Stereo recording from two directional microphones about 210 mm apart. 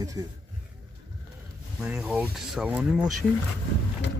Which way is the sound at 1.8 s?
5° right (ahead or behind).